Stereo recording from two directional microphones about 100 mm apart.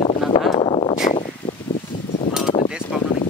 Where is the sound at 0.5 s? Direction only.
55° left (ahead or behind).